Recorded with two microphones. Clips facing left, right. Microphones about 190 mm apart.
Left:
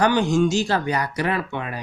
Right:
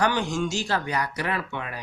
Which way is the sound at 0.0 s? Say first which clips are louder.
Left 6 dB; 20° left (ahead or behind).